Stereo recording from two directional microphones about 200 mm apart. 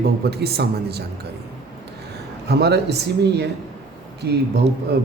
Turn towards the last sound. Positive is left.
turn(degrees=-55)  # may be behind; listen again after turning